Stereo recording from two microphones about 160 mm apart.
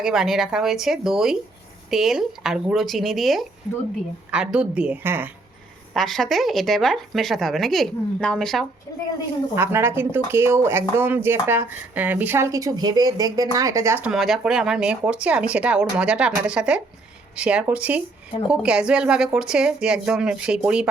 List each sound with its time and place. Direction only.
0.0 s a woman's voice: centre (ahead or behind)
5.9 s a woman's voice: centre (ahead or behind)
9.6 s speech: 15° right (ahead or behind)
14.1 s a woman's voice: centre (ahead or behind)